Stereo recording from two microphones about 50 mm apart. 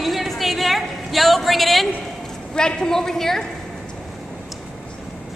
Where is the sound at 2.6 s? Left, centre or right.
Centre.